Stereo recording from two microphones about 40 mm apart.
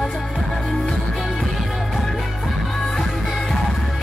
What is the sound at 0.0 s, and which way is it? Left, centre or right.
Music, centre.